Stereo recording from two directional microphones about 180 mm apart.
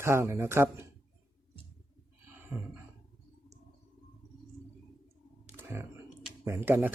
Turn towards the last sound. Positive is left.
turn(degrees=-10)  # may be behind; listen again after turning